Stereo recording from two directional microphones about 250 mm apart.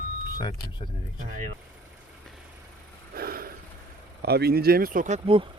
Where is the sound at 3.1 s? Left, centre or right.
Right.